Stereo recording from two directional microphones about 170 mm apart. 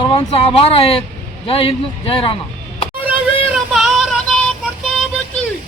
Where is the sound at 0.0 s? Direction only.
30° left (ahead or behind).